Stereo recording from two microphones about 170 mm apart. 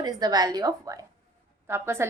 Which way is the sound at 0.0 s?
25° right (ahead or behind).